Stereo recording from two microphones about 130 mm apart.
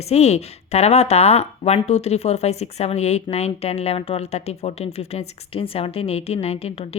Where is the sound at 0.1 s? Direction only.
55° left (ahead or behind).